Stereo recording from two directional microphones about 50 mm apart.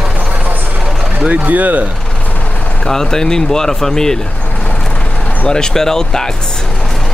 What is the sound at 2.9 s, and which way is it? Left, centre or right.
Speech, centre.